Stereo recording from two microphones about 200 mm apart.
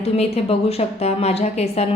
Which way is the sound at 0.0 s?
30° left (ahead or behind).